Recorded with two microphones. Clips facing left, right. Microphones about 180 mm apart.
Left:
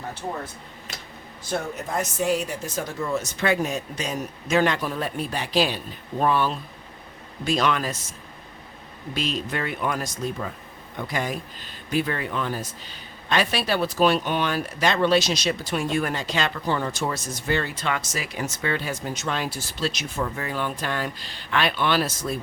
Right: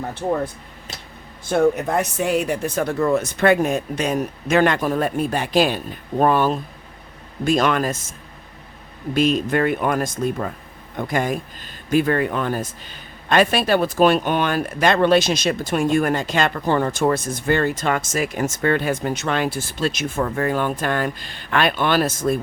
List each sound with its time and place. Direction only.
1.5 s speech: 55° right (ahead or behind)
9.1 s speech: 50° right (ahead or behind)